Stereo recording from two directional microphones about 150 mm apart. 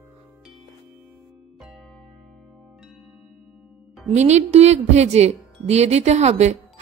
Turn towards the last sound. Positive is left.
turn(degrees=-45)  # may be behind; listen again after turning